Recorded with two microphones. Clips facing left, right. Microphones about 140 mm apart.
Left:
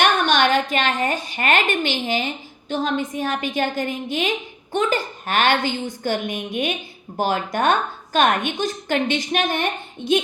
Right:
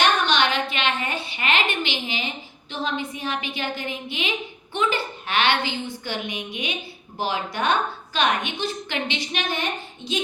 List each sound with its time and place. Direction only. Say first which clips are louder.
0.0 s a woman's voice: left 3 dB; 50° left (ahead or behind)